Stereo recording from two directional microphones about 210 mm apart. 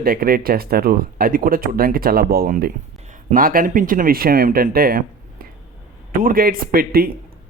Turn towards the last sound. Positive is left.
turn(degrees=-45)  # may be behind; listen again after turning